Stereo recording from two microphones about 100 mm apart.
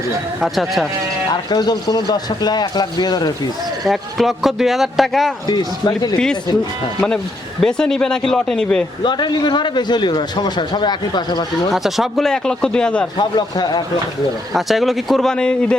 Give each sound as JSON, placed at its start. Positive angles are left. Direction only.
{"t": 0.4, "sound": "speech", "side_deg": 0}
{"t": 1.3, "sound": "a man's voice", "side_deg": 45}
{"t": 3.8, "sound": "speech", "side_deg": 0}
{"t": 5.5, "sound": "speech", "side_deg": 40}
{"t": 7.6, "sound": "speech", "side_deg": 5}
{"t": 9.0, "sound": "a man's voice", "side_deg": 45}
{"t": 11.7, "sound": "speech", "side_deg": 0}
{"t": 13.1, "sound": "a man's voice", "side_deg": 45}
{"t": 14.5, "sound": "speech", "side_deg": 0}